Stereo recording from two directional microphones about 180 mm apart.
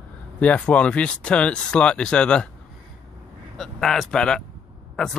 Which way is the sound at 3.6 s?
Centre (ahead or behind).